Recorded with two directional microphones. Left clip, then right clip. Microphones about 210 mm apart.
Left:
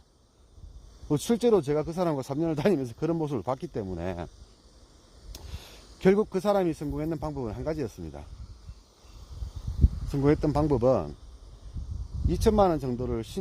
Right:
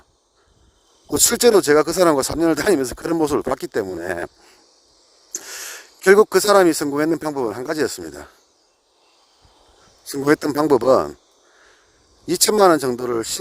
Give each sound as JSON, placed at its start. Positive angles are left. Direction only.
{"t": 1.1, "sound": "speech", "side_deg": -45}
{"t": 6.1, "sound": "speech", "side_deg": -45}
{"t": 10.1, "sound": "speech", "side_deg": -40}
{"t": 12.3, "sound": "speech", "side_deg": -40}